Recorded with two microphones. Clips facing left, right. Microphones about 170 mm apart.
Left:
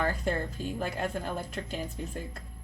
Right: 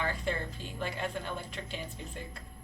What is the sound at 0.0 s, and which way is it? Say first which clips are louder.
A woman's voice: left 4 dB; 45° left (ahead or behind).